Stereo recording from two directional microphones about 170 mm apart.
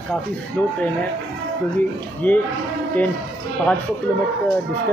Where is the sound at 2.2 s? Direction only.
10° left (ahead or behind).